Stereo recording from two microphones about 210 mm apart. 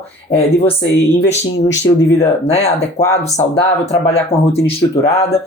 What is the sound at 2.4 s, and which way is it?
Speech, 30° left (ahead or behind).